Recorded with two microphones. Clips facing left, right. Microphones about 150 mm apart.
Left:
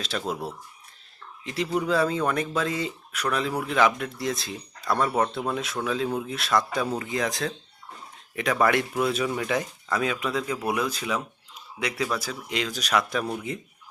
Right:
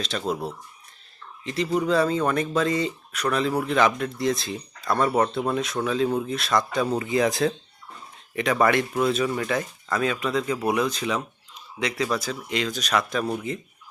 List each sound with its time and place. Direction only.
0.0 s speech: 5° left (ahead or behind)
6.8 s speech: 10° right (ahead or behind); by 13.2 s 10° left (ahead or behind)